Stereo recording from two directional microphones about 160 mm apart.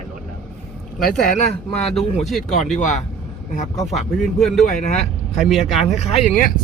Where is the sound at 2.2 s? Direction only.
Centre (ahead or behind).